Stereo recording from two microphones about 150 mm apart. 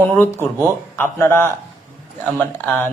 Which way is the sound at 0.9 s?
15° left (ahead or behind).